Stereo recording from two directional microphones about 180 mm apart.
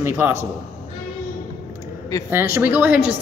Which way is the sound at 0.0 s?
15° right (ahead or behind).